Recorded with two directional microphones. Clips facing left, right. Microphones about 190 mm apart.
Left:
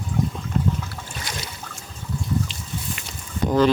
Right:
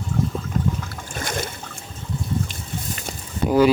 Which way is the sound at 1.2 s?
50° right (ahead or behind).